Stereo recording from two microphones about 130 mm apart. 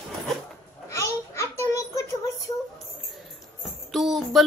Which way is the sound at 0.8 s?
25° left (ahead or behind).